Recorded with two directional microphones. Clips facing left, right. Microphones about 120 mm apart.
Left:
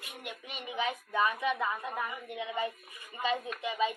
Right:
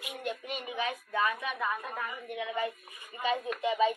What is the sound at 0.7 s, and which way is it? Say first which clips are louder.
A woman's voice: left 2 dB; 20° left (ahead or behind).